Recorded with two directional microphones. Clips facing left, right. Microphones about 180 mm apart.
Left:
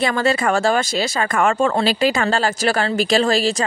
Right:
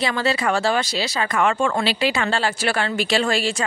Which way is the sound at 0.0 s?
50° left (ahead or behind).